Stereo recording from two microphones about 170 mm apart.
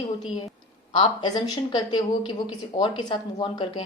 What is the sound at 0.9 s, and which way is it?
Speech, 25° left (ahead or behind).